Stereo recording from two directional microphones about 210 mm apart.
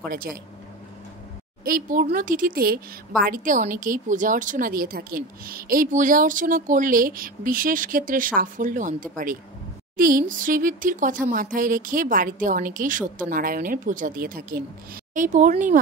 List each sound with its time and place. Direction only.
0.0 s a woman's voice: 45° right (ahead or behind)
1.6 s a woman's voice: 40° right (ahead or behind)